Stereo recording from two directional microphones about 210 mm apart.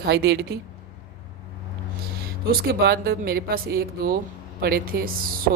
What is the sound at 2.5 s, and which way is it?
Speech, 45° right (ahead or behind).